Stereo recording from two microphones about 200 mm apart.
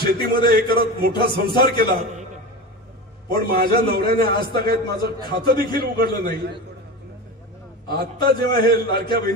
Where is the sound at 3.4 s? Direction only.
50° right (ahead or behind).